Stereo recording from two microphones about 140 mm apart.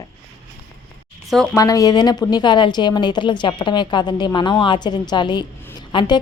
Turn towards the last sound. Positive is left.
turn(degrees=35)  # may be behind; listen again after turning